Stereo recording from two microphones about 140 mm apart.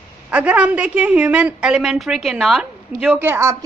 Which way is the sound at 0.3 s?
10° right (ahead or behind).